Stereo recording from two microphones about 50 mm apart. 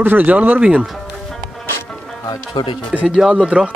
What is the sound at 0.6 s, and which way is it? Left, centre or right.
Speech, centre.